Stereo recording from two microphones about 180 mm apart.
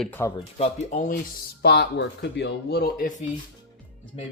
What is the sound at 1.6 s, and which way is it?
Speech, 70° left (ahead or behind).